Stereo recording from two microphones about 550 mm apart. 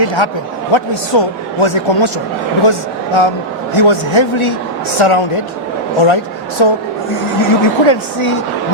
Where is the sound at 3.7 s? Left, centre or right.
Left.